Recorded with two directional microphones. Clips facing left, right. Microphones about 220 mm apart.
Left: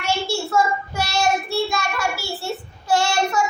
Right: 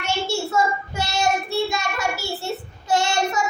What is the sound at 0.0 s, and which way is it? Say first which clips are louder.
Child singing: left 1 dB; 20° right (ahead or behind).